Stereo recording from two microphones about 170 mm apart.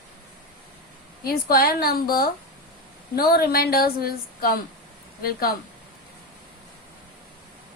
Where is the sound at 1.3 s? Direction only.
60° left (ahead or behind).